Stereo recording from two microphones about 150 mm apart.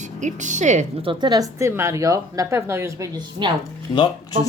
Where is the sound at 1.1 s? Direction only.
25° right (ahead or behind).